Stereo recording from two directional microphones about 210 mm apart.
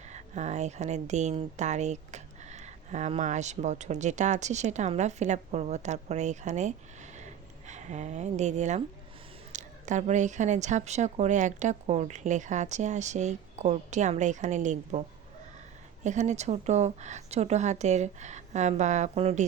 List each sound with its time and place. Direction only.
0.0 s speech: 35° right (ahead or behind)
16.0 s speech: 35° right (ahead or behind)